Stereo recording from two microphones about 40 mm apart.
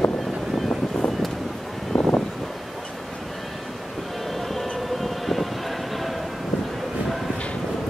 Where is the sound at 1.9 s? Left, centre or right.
Centre.